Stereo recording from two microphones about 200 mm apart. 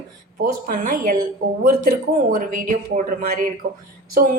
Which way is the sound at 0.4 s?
45° right (ahead or behind).